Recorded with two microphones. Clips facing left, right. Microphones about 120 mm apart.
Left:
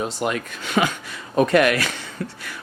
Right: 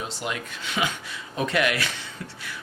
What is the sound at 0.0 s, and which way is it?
Speech, 50° left (ahead or behind).